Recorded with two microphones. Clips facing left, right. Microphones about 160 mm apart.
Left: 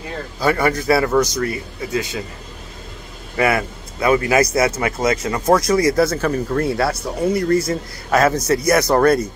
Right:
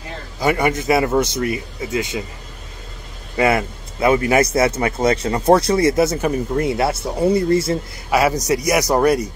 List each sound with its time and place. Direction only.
0.4 s a man's voice: 20° right (ahead or behind)
3.3 s a man's voice: 25° right (ahead or behind)
8.1 s a man's voice: 10° right (ahead or behind)